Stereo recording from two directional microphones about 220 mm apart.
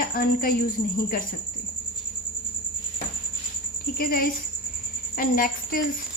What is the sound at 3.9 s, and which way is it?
A woman's voice, 40° left (ahead or behind).